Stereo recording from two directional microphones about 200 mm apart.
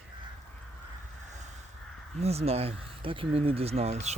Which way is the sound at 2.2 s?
30° right (ahead or behind).